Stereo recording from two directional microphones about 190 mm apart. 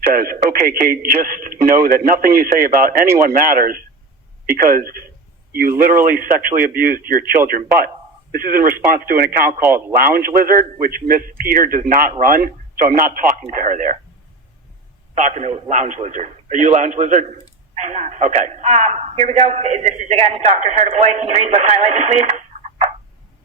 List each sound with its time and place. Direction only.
0.1 s a man's voice: 50° right (ahead or behind)
15.1 s a man's voice: 40° right (ahead or behind)